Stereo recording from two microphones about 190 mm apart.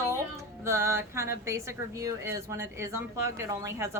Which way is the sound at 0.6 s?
15° right (ahead or behind).